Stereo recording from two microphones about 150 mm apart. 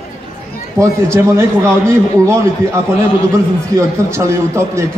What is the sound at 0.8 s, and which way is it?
A man's voice, 20° right (ahead or behind).